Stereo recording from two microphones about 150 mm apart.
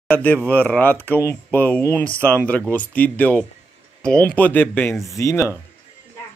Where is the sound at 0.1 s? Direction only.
10° left (ahead or behind).